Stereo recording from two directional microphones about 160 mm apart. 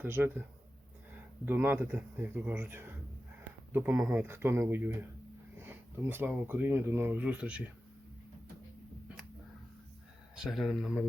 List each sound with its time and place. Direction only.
0.0 s speech: 15° right (ahead or behind)
1.5 s speech: 15° right (ahead or behind)
10.3 s speech: centre (ahead or behind)